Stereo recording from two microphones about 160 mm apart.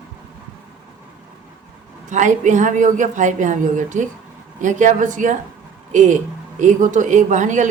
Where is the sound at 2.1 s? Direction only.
50° right (ahead or behind).